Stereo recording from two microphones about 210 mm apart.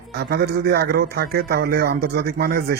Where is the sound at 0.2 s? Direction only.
50° right (ahead or behind).